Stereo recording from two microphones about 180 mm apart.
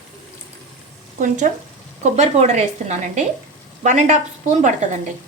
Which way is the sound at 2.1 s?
40° right (ahead or behind).